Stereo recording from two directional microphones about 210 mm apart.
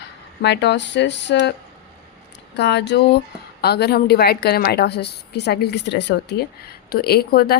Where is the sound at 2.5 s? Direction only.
55° left (ahead or behind).